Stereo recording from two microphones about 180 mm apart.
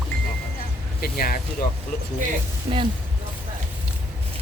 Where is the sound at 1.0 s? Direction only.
55° left (ahead or behind).